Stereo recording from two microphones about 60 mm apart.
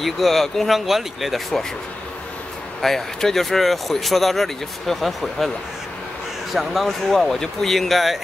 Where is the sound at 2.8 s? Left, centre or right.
Centre.